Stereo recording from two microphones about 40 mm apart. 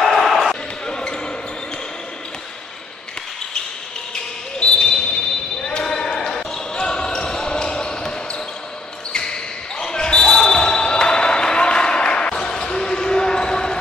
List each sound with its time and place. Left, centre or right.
0.0 s basketball bounce: centre
0.8 s basketball bounce: left
4.1 s basketball bounce: left
9.1 s basketball bounce: centre